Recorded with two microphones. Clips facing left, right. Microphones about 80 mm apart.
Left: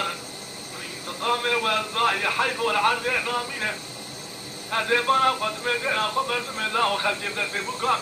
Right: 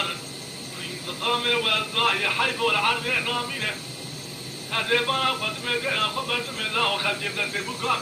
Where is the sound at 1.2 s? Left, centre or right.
Left.